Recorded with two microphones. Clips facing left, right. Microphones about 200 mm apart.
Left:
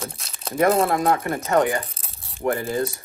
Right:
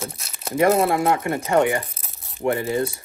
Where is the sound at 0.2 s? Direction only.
Centre (ahead or behind).